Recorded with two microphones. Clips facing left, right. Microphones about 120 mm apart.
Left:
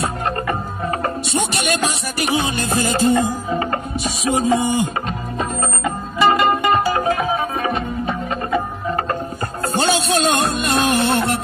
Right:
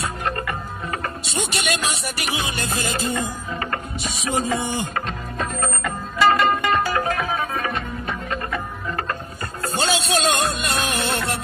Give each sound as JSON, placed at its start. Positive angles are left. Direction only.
{"t": 1.0, "sound": "music", "side_deg": 30}
{"t": 2.6, "sound": "music", "side_deg": 40}
{"t": 3.3, "sound": "music", "side_deg": 25}
{"t": 9.8, "sound": "music", "side_deg": 30}